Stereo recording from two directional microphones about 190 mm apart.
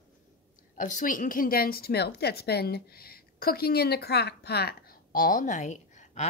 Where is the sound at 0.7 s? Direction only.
45° left (ahead or behind).